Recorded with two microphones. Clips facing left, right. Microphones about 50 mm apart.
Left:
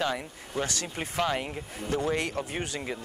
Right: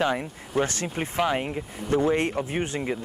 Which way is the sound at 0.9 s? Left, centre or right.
Centre.